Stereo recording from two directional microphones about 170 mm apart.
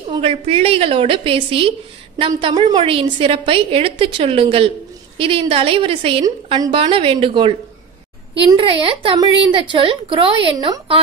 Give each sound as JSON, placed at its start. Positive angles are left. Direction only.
{"t": 0.1, "sound": "a woman's voice", "side_deg": -35}